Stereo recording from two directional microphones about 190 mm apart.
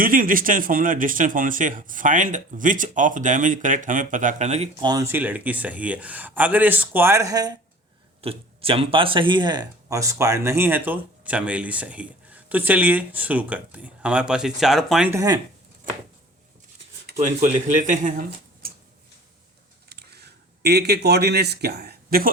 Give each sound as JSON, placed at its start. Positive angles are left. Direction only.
{"t": 0.0, "sound": "speech", "side_deg": -45}
{"t": 4.9, "sound": "speech", "side_deg": -15}
{"t": 8.2, "sound": "speech", "side_deg": -30}
{"t": 15.1, "sound": "speech", "side_deg": -20}
{"t": 17.1, "sound": "speech", "side_deg": -45}
{"t": 19.9, "sound": "a sound", "side_deg": -55}